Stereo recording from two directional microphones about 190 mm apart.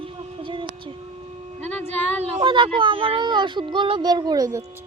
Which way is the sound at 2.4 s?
25° right (ahead or behind).